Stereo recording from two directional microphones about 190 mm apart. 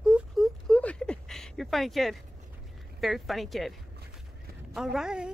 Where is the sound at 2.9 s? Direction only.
Centre (ahead or behind).